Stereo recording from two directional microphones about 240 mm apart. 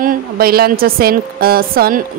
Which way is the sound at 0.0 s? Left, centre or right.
Right.